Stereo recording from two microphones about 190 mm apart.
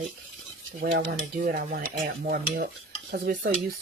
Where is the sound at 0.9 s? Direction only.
55° right (ahead or behind).